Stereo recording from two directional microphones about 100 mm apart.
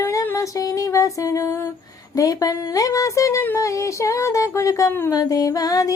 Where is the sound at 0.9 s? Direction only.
35° left (ahead or behind).